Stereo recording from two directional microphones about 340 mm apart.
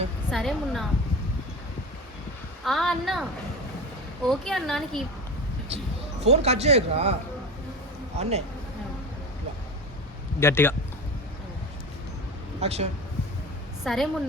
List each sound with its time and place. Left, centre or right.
0.3 s speech: centre
2.6 s speech: centre
4.3 s speech: centre
5.7 s speech: centre
8.2 s speech: centre
10.4 s a man's voice: centre
12.5 s speech: centre
13.8 s speech: centre